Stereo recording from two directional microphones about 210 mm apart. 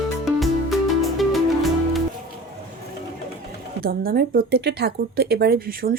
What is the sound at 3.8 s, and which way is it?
A woman's voice, 45° right (ahead or behind).